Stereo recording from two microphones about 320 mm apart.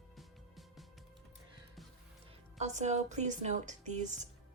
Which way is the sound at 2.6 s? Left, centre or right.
Right.